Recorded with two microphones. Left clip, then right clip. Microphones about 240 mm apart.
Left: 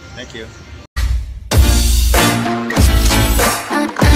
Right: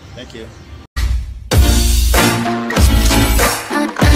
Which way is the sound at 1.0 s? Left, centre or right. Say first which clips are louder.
Right 1 dB; centre.